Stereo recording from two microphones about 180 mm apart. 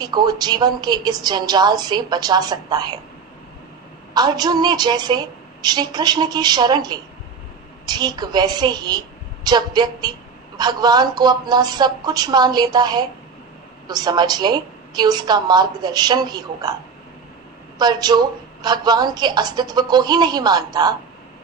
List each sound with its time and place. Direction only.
0.0 s a woman's voice: 25° right (ahead or behind)
4.1 s a woman's voice: 20° right (ahead or behind)
17.7 s a woman's voice: 25° right (ahead or behind)